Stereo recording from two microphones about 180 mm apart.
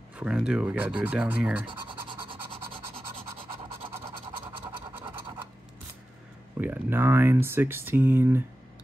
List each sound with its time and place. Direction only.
0.2 s speech: 5° right (ahead or behind)
1.7 s scratch: 30° right (ahead or behind)
6.6 s speech: 10° right (ahead or behind)